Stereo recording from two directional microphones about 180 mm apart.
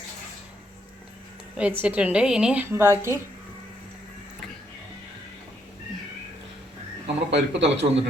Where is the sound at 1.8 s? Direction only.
10° right (ahead or behind).